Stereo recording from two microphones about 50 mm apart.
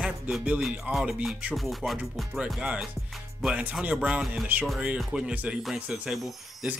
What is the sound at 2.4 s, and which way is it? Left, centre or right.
Speech, right.